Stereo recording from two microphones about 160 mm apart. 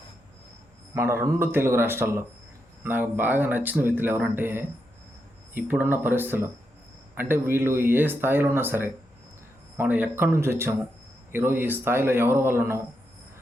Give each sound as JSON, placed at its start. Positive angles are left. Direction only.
{"t": 0.9, "sound": "speech", "side_deg": -15}